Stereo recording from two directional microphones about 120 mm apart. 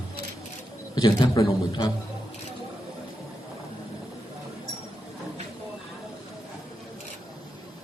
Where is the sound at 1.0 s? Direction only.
35° left (ahead or behind).